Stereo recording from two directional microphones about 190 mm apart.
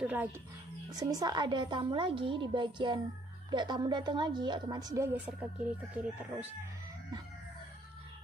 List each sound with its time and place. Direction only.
0.0 s speech: 10° right (ahead or behind)
0.8 s a woman's voice: 20° right (ahead or behind)
5.2 s speech: 5° right (ahead or behind)